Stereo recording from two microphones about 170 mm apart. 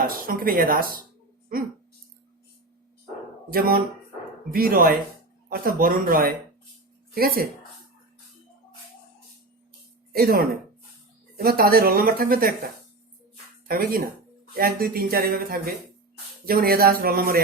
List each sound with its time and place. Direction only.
0.0 s a woman's voice: 55° right (ahead or behind)
3.5 s a woman's voice: 60° right (ahead or behind)
10.1 s a woman's voice: 60° right (ahead or behind)
13.7 s a woman's voice: 60° right (ahead or behind)